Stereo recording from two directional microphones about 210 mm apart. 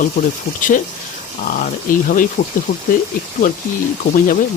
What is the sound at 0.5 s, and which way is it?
Speech, 50° left (ahead or behind).